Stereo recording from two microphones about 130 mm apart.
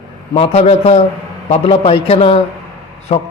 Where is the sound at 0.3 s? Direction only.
55° left (ahead or behind).